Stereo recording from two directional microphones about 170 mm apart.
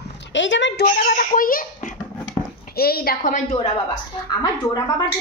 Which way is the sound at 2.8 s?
60° left (ahead or behind).